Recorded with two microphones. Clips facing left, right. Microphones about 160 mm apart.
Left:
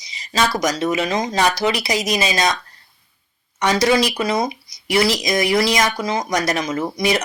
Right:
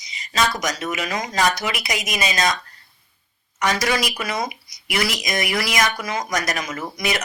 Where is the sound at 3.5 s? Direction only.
25° left (ahead or behind).